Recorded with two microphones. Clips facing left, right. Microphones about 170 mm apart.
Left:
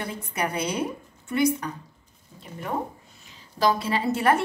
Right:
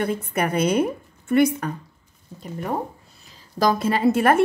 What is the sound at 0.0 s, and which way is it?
A woman's voice, 55° right (ahead or behind).